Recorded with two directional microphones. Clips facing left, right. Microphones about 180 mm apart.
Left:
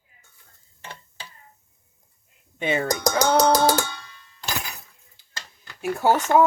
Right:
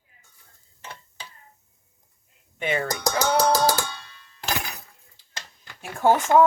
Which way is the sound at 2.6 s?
25° left (ahead or behind).